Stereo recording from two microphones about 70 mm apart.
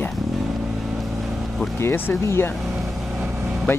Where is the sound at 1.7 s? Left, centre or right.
Left.